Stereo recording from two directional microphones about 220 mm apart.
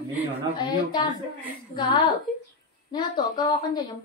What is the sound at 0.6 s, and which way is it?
Speech, 20° left (ahead or behind).